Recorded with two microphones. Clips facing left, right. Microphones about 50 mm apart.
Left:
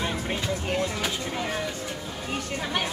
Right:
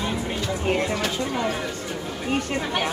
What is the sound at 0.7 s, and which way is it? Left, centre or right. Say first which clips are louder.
Speech: right 6 dB; right.